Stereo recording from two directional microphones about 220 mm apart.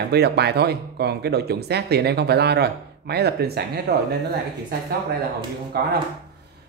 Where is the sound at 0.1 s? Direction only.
50° right (ahead or behind).